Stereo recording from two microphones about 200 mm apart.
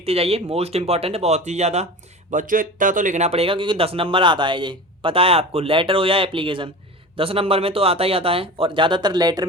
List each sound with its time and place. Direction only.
0.0 s speech: 30° right (ahead or behind)